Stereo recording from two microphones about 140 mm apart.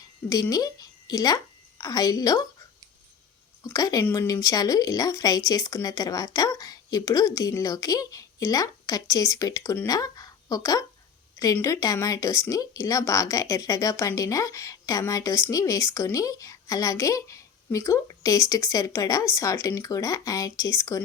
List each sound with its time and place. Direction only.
0.5 s speech: 25° left (ahead or behind)
3.6 s speech: 25° left (ahead or behind)